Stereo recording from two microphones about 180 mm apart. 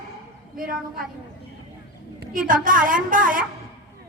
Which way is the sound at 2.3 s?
50° right (ahead or behind).